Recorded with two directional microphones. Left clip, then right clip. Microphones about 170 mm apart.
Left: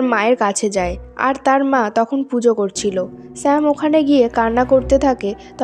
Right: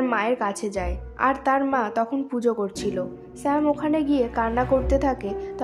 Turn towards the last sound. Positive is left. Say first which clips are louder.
# left 8 dB
turn(degrees=40)  # may be behind; listen again after turning